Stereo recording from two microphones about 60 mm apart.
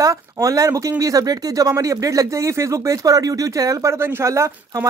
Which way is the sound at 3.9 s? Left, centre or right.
Right.